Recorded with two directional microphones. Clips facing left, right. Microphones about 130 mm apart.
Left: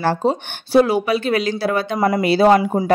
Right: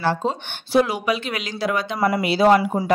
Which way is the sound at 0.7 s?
35° left (ahead or behind).